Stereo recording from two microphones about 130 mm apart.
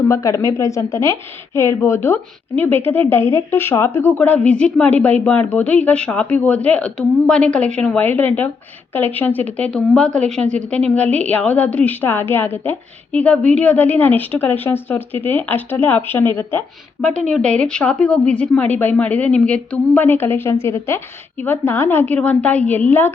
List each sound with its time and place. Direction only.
0.1 s a woman's voice: 25° left (ahead or behind)
17.1 s speech: 70° right (ahead or behind)
17.3 s a woman's voice: 10° left (ahead or behind)